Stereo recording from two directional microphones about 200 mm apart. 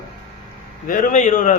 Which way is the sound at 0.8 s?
40° left (ahead or behind).